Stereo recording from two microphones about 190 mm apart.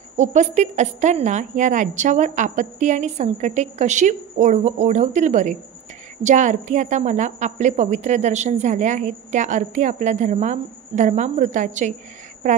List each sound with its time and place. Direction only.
0.2 s a woman's voice: 40° right (ahead or behind)